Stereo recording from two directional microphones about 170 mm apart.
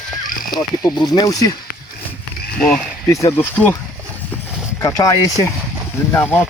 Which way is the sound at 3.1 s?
20° left (ahead or behind).